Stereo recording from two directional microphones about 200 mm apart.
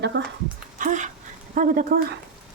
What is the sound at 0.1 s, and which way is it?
Speech, 65° right (ahead or behind).